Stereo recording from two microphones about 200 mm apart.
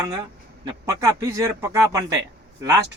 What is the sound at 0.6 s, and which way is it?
A man's voice, 15° right (ahead or behind).